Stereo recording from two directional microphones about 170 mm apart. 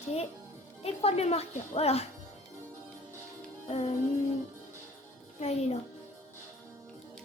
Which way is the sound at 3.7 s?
40° left (ahead or behind).